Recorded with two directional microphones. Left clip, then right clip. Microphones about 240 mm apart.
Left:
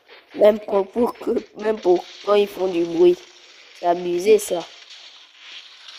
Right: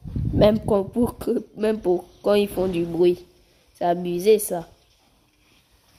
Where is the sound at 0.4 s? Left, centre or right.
Centre.